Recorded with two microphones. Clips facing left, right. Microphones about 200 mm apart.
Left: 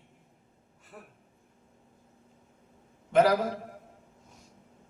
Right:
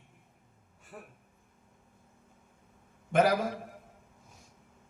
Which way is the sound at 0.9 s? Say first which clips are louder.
Right 1 dB; centre (ahead or behind).